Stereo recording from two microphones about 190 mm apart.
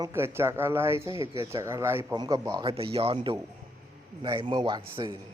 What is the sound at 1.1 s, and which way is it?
Speech, 25° left (ahead or behind).